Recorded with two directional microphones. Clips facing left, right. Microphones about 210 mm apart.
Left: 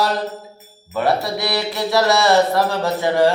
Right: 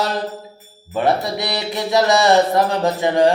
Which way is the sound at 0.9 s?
20° right (ahead or behind).